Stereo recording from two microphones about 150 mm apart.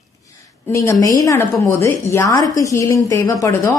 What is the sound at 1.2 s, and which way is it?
A woman's voice, 20° left (ahead or behind).